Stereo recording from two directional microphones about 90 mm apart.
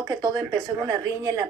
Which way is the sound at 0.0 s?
45° right (ahead or behind).